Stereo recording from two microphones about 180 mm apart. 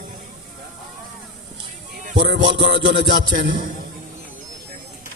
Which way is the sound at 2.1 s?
75° right (ahead or behind).